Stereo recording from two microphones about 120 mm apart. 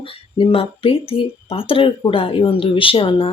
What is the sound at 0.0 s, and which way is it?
Speech, 50° left (ahead or behind).